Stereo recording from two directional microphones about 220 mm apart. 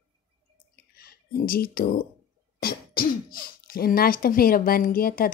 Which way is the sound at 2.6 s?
40° left (ahead or behind).